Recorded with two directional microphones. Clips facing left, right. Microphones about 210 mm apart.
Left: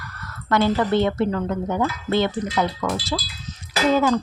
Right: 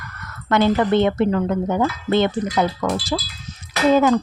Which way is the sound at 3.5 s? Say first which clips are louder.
Left 1 dB; 10° right (ahead or behind).